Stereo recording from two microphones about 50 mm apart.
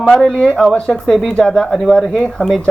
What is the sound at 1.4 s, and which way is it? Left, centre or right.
Speech, centre.